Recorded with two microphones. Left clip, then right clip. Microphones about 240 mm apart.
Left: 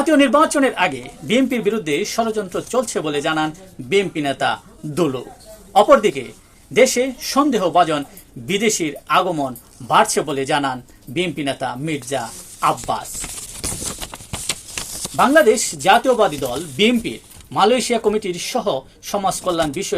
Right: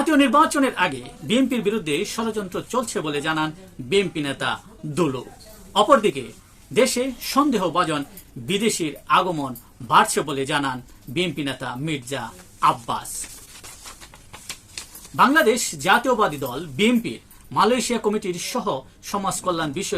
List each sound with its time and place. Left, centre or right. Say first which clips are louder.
0.0 s speech: left 3 dB; centre
15.1 s speech: left 4 dB; centre